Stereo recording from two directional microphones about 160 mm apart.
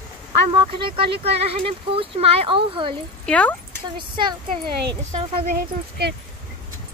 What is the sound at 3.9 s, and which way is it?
Speech, 30° right (ahead or behind).